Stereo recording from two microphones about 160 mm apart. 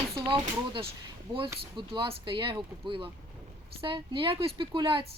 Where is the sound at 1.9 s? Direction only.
30° right (ahead or behind).